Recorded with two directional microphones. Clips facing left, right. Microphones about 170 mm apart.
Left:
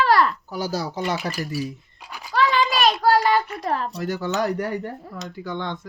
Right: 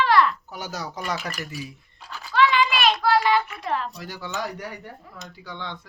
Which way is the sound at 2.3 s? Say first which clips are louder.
Even; 40° left (ahead or behind).